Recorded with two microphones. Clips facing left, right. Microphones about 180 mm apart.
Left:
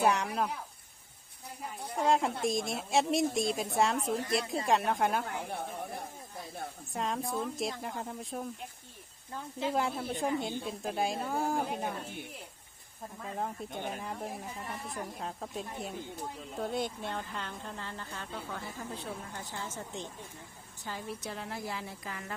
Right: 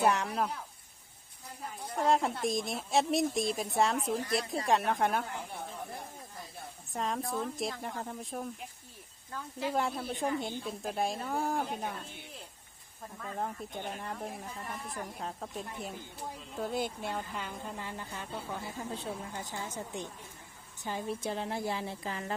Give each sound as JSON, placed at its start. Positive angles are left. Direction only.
{"t": 0.0, "sound": "a woman's voice", "side_deg": 0}
{"t": 2.0, "sound": "a woman's voice", "side_deg": 0}
{"t": 6.9, "sound": "a woman's voice", "side_deg": 0}
{"t": 9.3, "sound": "speech", "side_deg": 25}
{"t": 9.7, "sound": "a woman's voice", "side_deg": 0}
{"t": 13.2, "sound": "a woman's voice", "side_deg": 0}